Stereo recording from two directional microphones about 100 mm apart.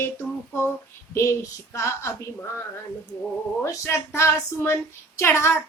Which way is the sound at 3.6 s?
30° left (ahead or behind).